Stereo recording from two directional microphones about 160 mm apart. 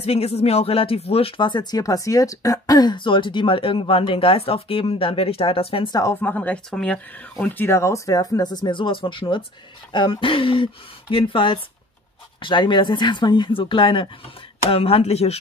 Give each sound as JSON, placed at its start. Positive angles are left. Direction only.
{"t": 0.0, "sound": "speech", "side_deg": 40}
{"t": 6.2, "sound": "speech", "side_deg": 10}